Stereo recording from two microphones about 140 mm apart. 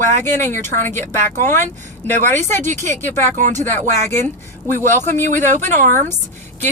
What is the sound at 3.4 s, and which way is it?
Speech, 60° right (ahead or behind).